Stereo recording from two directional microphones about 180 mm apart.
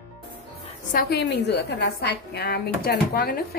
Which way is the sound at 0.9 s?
60° left (ahead or behind).